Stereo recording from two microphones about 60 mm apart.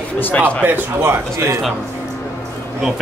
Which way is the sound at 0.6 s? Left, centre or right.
Right.